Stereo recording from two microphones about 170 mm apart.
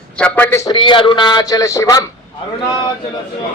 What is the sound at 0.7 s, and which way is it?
Speech, 30° left (ahead or behind).